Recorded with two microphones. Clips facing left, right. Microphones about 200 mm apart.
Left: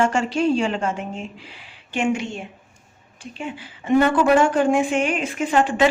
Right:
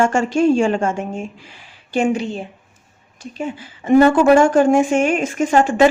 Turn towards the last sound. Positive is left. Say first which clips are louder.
# right 5 dB
turn(degrees=-45)  # may be behind; listen again after turning